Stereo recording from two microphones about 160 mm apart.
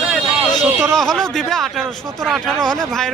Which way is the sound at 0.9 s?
5° left (ahead or behind).